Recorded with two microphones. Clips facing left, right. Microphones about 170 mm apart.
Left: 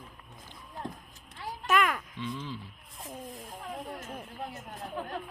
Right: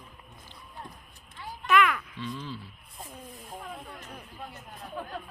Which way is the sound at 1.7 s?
40° left (ahead or behind).